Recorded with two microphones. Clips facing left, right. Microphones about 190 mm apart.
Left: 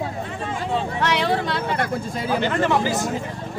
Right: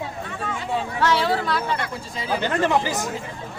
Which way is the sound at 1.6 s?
50° left (ahead or behind).